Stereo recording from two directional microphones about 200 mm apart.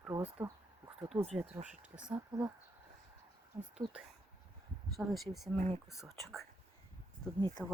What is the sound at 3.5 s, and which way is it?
Speech, 15° right (ahead or behind).